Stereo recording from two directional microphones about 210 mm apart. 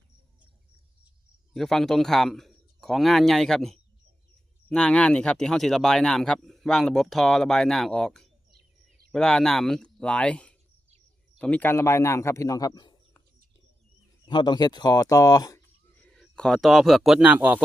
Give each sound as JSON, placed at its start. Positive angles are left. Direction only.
{"t": 1.5, "sound": "a man's voice", "side_deg": 0}
{"t": 14.3, "sound": "speech", "side_deg": 20}
{"t": 16.0, "sound": "speech", "side_deg": 5}